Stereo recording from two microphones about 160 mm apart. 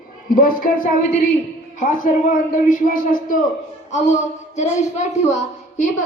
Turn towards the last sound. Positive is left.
turn(degrees=50)  # may be behind; listen again after turning